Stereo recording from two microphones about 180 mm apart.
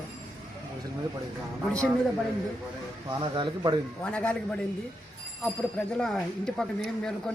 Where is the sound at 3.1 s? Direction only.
25° right (ahead or behind).